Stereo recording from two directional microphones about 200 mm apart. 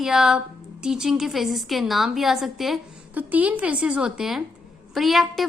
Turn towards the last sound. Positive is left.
turn(degrees=0)  # may be behind; listen again after turning